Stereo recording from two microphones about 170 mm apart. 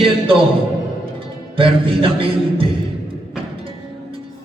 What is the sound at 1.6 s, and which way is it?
Music, 30° right (ahead or behind).